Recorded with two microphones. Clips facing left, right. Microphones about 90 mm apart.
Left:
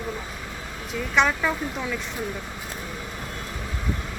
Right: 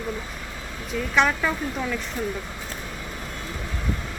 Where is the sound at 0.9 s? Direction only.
Centre (ahead or behind).